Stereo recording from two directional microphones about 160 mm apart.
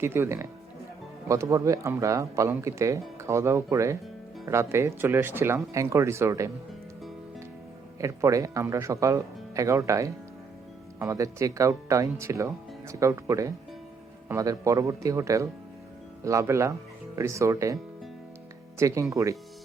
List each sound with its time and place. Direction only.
0.0 s speech: 15° right (ahead or behind)
7.9 s speech: 20° right (ahead or behind)
18.8 s speech: 20° right (ahead or behind)